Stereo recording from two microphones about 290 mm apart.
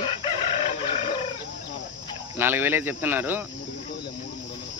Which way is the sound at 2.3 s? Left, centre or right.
Centre.